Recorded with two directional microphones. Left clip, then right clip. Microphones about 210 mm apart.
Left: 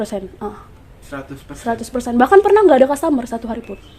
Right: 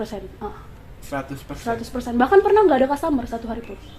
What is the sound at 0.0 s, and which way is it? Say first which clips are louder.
Speech: left 6 dB; 55° left (ahead or behind).